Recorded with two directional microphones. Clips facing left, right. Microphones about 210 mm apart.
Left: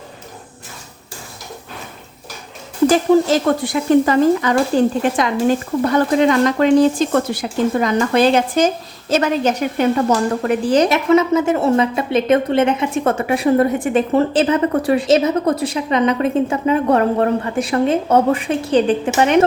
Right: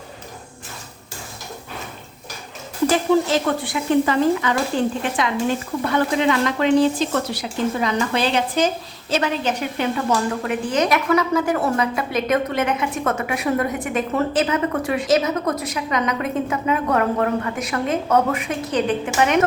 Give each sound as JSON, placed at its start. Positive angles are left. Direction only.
{"t": 2.9, "sound": "speech", "side_deg": 40}
{"t": 5.9, "sound": "speech", "side_deg": 40}